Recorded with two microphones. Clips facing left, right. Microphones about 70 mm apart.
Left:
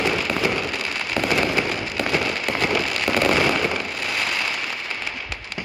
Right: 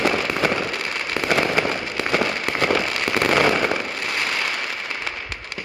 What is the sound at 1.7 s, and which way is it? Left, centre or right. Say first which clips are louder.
Fireworks: even; right.